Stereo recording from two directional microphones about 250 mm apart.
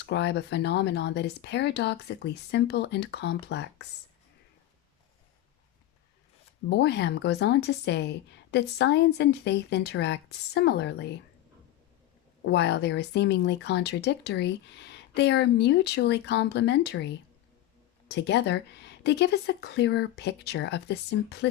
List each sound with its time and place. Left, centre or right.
0.0 s speech: left
6.7 s speech: left
12.4 s speech: left
18.1 s speech: left